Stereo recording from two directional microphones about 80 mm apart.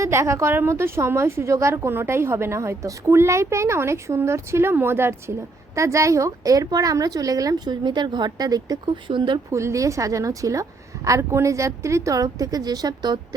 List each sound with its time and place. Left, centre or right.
0.0 s a woman's voice: right
7.7 s a woman's voice: right
9.0 s speech: right
9.5 s a woman's voice: right